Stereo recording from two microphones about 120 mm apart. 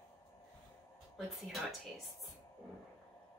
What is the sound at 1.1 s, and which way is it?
Speech, centre (ahead or behind).